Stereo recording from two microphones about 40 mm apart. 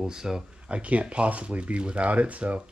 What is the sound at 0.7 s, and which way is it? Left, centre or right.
Speech, right.